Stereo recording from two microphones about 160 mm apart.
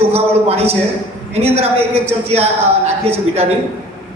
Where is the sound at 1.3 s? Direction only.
40° right (ahead or behind).